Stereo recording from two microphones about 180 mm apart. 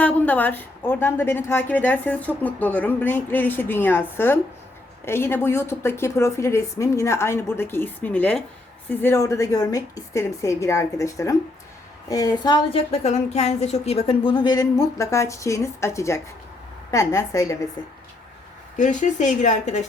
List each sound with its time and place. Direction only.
0.0 s a woman's voice: 10° left (ahead or behind)
18.8 s speech: 45° left (ahead or behind)